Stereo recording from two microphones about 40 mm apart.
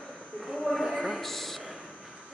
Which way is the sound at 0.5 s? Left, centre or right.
Left.